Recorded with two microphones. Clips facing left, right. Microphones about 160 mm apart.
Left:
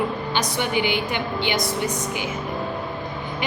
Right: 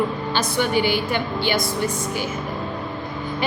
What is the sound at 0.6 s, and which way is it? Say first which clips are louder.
A woman's voice: right 4 dB; 15° left (ahead or behind).